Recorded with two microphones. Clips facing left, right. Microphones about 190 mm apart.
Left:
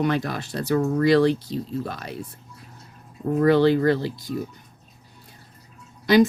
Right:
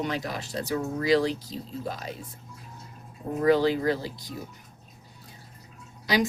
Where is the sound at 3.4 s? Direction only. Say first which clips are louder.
Left 4 dB; 65° left (ahead or behind).